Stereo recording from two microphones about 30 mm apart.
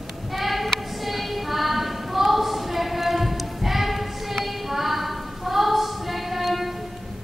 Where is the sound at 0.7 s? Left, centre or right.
Centre.